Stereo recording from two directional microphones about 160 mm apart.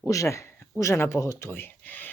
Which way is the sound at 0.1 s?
20° left (ahead or behind).